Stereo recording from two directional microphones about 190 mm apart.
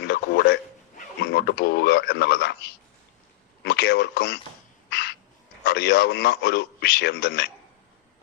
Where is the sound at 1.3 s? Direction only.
60° left (ahead or behind).